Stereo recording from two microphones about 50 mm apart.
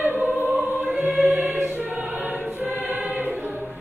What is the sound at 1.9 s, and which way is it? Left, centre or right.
Choir, right.